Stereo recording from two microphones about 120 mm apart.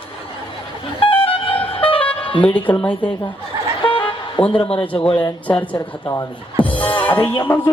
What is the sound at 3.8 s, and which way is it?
Vehicle, 45° left (ahead or behind).